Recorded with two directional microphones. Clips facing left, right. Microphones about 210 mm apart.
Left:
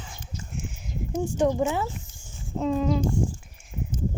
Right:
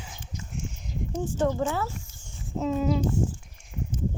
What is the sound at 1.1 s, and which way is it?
Speech, 15° left (ahead or behind).